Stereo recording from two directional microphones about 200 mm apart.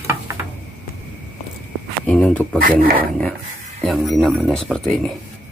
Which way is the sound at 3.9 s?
Centre (ahead or behind).